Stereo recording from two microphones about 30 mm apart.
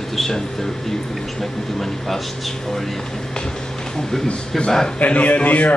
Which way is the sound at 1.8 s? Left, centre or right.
Centre.